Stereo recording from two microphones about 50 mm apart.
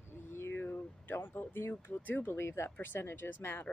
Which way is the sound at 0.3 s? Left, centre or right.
Left.